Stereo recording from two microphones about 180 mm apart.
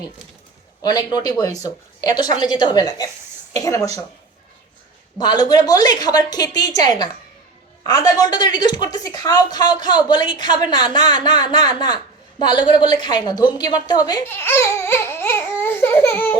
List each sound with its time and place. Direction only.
0.8 s a woman's voice: 25° left (ahead or behind)
5.1 s a woman's voice: 25° left (ahead or behind)
14.3 s baby cry: 15° left (ahead or behind)